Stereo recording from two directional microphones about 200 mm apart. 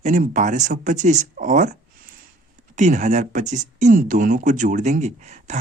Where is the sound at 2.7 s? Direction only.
35° right (ahead or behind).